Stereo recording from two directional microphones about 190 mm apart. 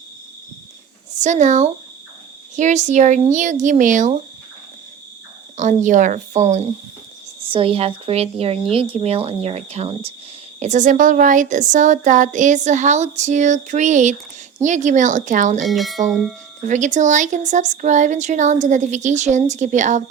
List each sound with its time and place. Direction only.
1.2 s a woman's voice: 40° right (ahead or behind)
5.5 s a woman's voice: 40° right (ahead or behind)
15.6 s speech: centre (ahead or behind)
16.6 s a woman's voice: 40° right (ahead or behind)